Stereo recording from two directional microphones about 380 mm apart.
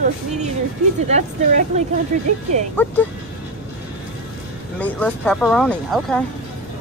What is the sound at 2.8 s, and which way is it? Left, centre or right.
Speech, centre.